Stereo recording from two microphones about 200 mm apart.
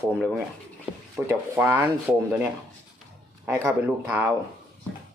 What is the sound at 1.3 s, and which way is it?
Speech, 10° right (ahead or behind).